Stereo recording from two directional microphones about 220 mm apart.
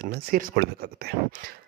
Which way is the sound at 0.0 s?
45° right (ahead or behind).